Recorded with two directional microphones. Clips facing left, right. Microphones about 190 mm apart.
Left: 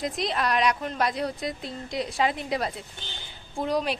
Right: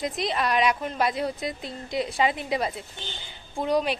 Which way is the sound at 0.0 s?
Centre (ahead or behind).